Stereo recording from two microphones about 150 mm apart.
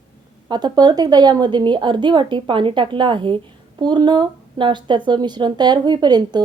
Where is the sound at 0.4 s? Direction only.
25° right (ahead or behind).